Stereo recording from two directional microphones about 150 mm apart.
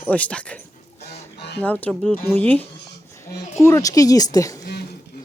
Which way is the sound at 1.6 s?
10° left (ahead or behind).